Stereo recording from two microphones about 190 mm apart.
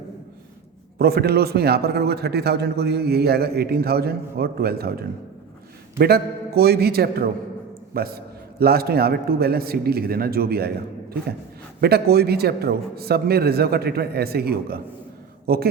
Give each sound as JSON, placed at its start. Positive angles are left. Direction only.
{"t": 0.9, "sound": "a man's voice", "side_deg": -55}
{"t": 11.8, "sound": "a man's voice", "side_deg": -55}